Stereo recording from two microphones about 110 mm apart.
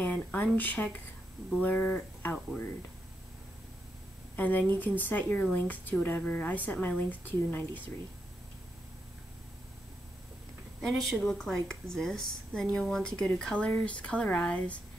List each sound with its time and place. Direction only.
0.0 s speech: 15° left (ahead or behind)
4.4 s speech: 15° left (ahead or behind)
10.8 s speech: centre (ahead or behind)